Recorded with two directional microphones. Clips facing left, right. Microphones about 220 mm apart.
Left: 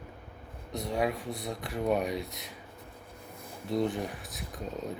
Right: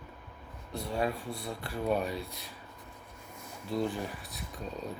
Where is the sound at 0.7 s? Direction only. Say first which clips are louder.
Left 2 dB; 20° left (ahead or behind).